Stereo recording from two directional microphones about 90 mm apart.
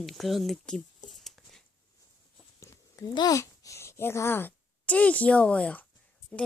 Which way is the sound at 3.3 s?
35° left (ahead or behind).